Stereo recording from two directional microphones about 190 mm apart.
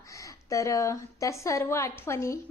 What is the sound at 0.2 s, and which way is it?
A woman's voice, 15° left (ahead or behind).